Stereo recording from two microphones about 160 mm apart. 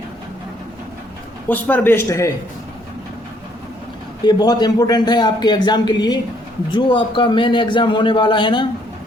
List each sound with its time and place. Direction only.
1.5 s a man's voice: 10° left (ahead or behind)
4.2 s a man's voice: 25° left (ahead or behind)